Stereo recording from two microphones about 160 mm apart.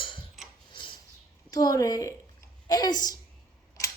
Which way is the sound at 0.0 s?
30° left (ahead or behind).